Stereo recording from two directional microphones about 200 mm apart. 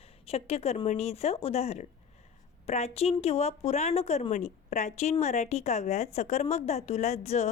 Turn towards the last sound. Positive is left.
turn(degrees=35)  # may be behind; listen again after turning